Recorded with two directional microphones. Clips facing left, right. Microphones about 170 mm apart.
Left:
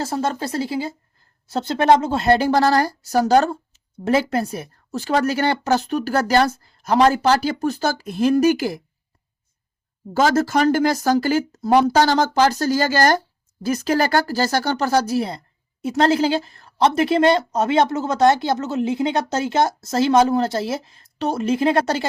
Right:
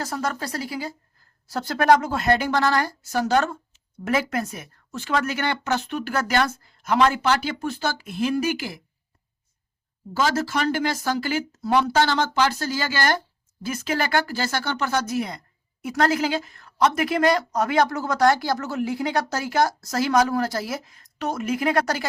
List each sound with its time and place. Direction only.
0.0 s a woman's voice: 25° left (ahead or behind); by 8.8 s 45° left (ahead or behind)
10.2 s a woman's voice: 45° left (ahead or behind); by 22.0 s 25° left (ahead or behind)